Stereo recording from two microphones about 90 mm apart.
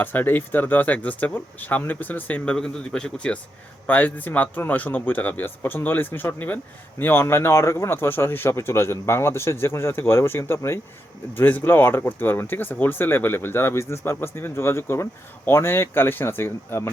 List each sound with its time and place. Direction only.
0.0 s speech: 20° left (ahead or behind)